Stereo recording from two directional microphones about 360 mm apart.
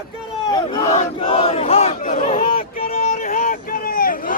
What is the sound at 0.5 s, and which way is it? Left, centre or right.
Battle cry, centre.